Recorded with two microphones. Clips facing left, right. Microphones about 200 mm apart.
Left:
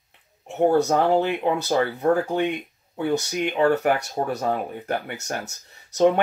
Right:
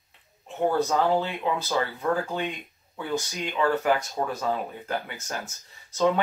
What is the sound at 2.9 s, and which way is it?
Speech, 65° left (ahead or behind).